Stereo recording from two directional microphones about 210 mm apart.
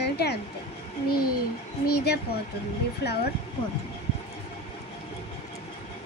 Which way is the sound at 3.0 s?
50° left (ahead or behind).